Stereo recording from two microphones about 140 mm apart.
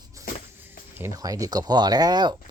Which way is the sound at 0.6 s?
20° right (ahead or behind).